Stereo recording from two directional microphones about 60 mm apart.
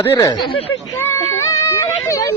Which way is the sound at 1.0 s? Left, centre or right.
Left.